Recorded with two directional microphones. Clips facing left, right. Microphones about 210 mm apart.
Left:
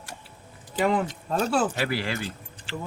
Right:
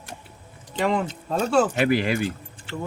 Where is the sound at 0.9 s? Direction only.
5° left (ahead or behind).